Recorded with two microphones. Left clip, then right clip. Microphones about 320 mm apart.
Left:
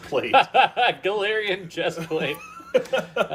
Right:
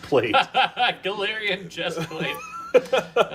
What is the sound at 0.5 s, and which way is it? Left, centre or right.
Speech, centre.